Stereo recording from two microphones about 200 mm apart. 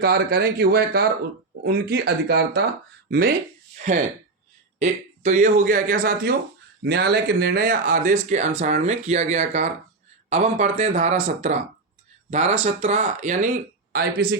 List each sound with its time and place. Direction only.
0.0 s speech: 50° right (ahead or behind)
4.8 s speech: 40° right (ahead or behind)
13.9 s speech: 50° right (ahead or behind)